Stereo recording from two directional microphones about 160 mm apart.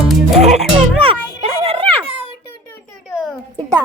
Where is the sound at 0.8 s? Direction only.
35° right (ahead or behind).